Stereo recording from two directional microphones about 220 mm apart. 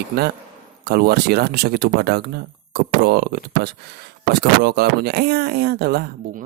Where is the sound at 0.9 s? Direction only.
45° right (ahead or behind).